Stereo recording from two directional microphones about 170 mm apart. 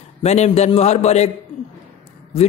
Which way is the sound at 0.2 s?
40° left (ahead or behind).